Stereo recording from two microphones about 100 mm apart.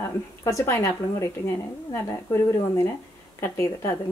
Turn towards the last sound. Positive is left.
turn(degrees=25)  # may be behind; listen again after turning